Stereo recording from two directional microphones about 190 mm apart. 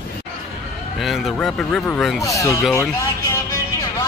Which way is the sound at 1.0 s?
Centre (ahead or behind).